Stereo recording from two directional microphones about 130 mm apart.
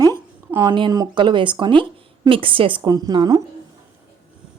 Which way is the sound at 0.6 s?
35° right (ahead or behind).